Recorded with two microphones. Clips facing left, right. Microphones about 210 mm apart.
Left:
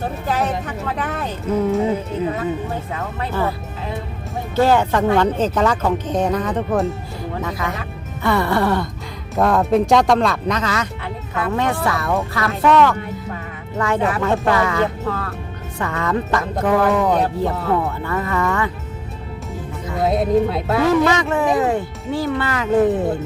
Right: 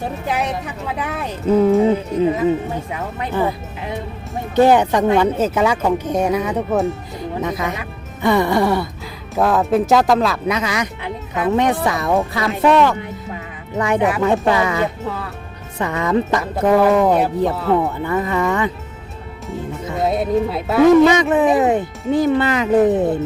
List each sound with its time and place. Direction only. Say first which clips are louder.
0.3 s speech: left 1 dB; 10° right (ahead or behind)
2.9 s speech: right 1 dB; 15° right (ahead or behind)
7.4 s speech: right 2 dB; 20° right (ahead or behind)
17.7 s speech: right 3 dB; 20° right (ahead or behind)
20.1 s speech: left 2 dB; centre (ahead or behind)
21.0 s speech: right 5 dB; 20° right (ahead or behind)